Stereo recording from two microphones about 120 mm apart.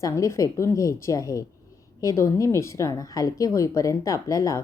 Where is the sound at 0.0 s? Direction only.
25° left (ahead or behind).